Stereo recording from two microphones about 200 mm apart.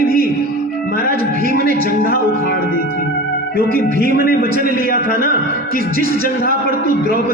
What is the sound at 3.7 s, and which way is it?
Speech, 45° right (ahead or behind).